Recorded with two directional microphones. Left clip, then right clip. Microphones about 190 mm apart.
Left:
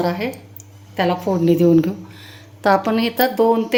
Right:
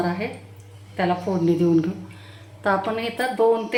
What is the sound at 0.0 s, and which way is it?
Speech, 55° left (ahead or behind).